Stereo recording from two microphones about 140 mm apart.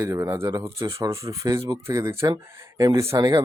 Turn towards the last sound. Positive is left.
turn(degrees=-25)  # may be behind; listen again after turning